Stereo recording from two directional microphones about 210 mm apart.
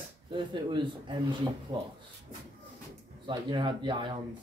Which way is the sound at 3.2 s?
20° right (ahead or behind).